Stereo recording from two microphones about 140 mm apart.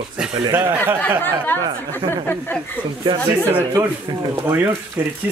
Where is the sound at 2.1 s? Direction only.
15° left (ahead or behind).